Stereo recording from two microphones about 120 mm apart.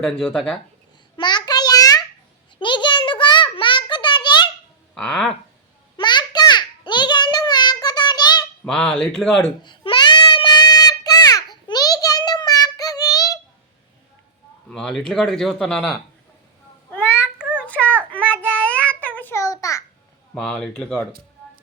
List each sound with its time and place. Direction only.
0.0 s a man's voice: centre (ahead or behind)
1.1 s a sound: 40° left (ahead or behind)
4.9 s speech: 5° left (ahead or behind)
6.0 s a sound: 40° left (ahead or behind)
8.6 s a man's voice: 5° left (ahead or behind)
9.6 s child singing: 40° left (ahead or behind)
14.7 s a man's voice: 5° left (ahead or behind)
16.9 s a sound: 15° left (ahead or behind)
17.3 s child singing: 10° right (ahead or behind)
17.7 s child singing: 10° left (ahead or behind)
19.4 s babbling: 25° left (ahead or behind)
20.3 s a man's voice: 5° left (ahead or behind)